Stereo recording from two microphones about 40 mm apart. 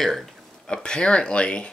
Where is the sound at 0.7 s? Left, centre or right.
Left.